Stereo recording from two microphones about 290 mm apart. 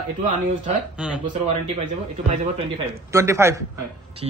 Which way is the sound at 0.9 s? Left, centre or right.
Centre.